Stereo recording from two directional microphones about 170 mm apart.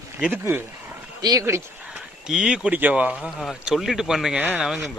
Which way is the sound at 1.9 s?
5° right (ahead or behind).